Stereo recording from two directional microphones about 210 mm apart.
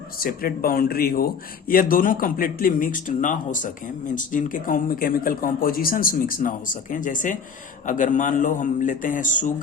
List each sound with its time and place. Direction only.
0.2 s speech: 45° left (ahead or behind)